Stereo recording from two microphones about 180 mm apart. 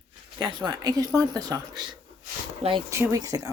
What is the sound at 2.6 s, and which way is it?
Speech, 40° right (ahead or behind).